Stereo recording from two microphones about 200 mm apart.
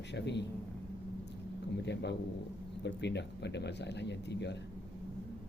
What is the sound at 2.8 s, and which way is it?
Speech, 60° left (ahead or behind).